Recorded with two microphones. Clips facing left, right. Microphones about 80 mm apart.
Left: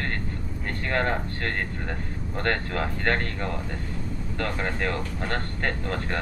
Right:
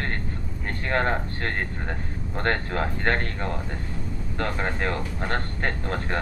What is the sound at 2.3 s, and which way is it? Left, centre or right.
Speech, right.